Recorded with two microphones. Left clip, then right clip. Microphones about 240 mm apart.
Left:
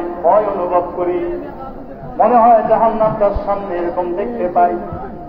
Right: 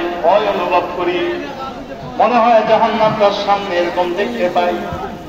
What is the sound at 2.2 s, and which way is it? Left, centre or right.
Speech, right.